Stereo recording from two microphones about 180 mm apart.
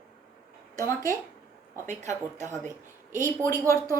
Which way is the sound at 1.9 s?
40° right (ahead or behind).